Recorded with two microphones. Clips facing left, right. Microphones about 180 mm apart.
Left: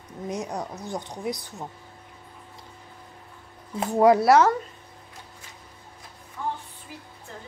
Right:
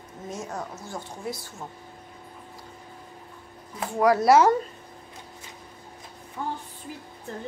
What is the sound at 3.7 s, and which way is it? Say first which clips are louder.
Speech: left 4 dB; 25° left (ahead or behind).